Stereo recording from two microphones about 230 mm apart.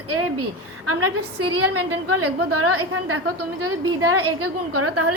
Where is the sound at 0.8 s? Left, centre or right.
Right.